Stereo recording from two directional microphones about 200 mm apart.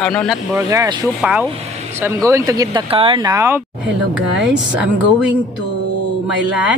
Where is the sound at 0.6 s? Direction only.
15° right (ahead or behind).